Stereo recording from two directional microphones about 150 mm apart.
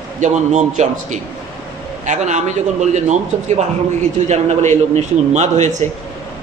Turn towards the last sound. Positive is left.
turn(degrees=-50)  # may be behind; listen again after turning